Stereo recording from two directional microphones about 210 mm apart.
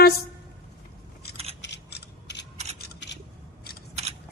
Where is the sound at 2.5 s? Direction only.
30° right (ahead or behind).